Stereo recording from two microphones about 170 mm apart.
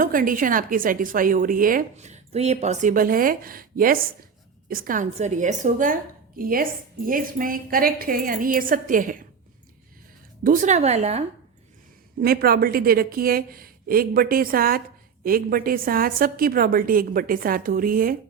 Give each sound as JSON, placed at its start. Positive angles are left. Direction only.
{"t": 0.0, "sound": "a woman's voice", "side_deg": -55}
{"t": 10.4, "sound": "a woman's voice", "side_deg": -50}
{"t": 12.2, "sound": "a woman's voice", "side_deg": -65}